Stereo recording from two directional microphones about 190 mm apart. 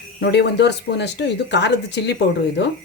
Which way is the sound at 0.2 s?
65° left (ahead or behind).